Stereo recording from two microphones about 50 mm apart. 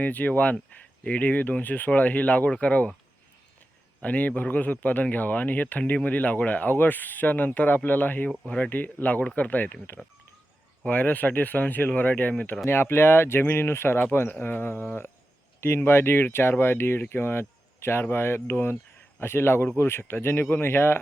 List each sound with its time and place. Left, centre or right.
0.0 s speech: left
4.0 s speech: left
8.4 s speech: left
10.8 s speech: left
12.6 s speech: left